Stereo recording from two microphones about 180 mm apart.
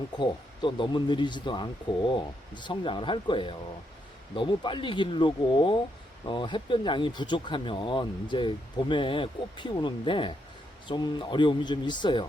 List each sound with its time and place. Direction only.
0.1 s speech: 25° left (ahead or behind)